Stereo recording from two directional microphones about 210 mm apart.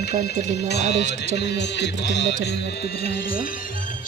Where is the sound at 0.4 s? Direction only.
35° right (ahead or behind).